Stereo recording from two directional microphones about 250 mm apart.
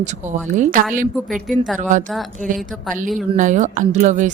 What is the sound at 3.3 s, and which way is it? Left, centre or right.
Speech, right.